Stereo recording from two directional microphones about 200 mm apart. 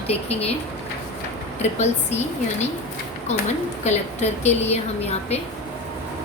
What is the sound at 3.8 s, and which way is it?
A woman's voice, 35° left (ahead or behind).